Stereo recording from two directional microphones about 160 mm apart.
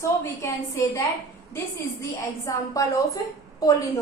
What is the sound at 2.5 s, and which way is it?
A woman's voice, 20° left (ahead or behind).